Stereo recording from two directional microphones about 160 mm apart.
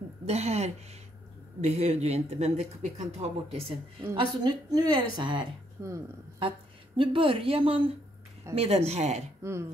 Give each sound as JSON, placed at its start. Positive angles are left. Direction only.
{"t": 0.3, "sound": "a woman's voice", "side_deg": -40}
{"t": 4.0, "sound": "a woman's voice", "side_deg": -25}
{"t": 7.0, "sound": "a woman's voice", "side_deg": -35}
{"t": 9.4, "sound": "speech", "side_deg": -15}